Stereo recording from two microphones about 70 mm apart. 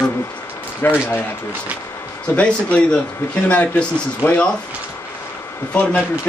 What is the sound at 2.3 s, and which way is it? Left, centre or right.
Speech, centre.